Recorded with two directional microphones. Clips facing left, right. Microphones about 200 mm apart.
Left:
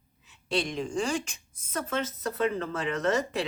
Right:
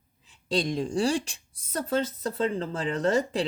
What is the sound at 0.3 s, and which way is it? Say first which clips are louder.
Speech: right 3 dB; 35° right (ahead or behind).